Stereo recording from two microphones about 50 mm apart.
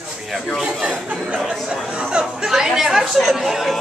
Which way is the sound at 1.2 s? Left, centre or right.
Centre.